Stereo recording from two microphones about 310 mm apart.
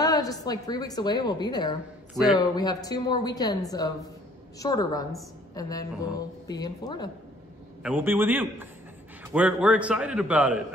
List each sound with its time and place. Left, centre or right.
0.0 s a woman's voice: centre
7.8 s a man's voice: centre